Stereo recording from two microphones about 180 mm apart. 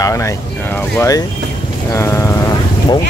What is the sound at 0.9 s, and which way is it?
Speech, 20° left (ahead or behind).